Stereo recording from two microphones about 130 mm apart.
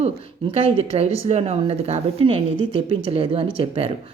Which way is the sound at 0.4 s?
50° right (ahead or behind).